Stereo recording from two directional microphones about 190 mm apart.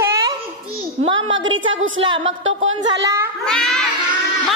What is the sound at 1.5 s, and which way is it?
A woman's voice, 90° right.